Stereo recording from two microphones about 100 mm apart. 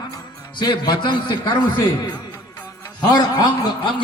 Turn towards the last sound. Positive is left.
turn(degrees=45)  # may be behind; listen again after turning